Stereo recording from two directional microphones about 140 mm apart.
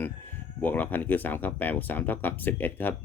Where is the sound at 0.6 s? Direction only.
10° left (ahead or behind).